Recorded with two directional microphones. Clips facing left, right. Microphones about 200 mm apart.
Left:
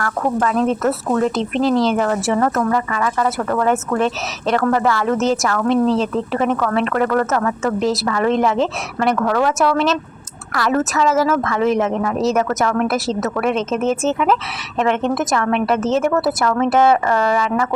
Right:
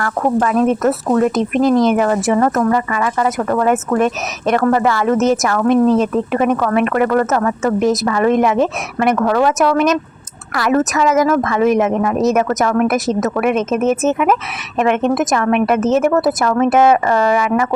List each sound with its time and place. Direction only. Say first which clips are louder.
0.0 s speech: right 3 dB; 20° right (ahead or behind)